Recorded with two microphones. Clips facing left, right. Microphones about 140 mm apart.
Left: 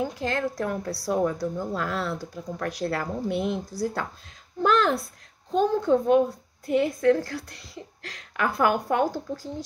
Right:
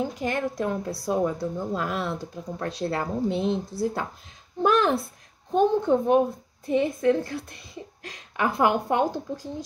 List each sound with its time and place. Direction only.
0.2 s a child's voice: 15° right (ahead or behind)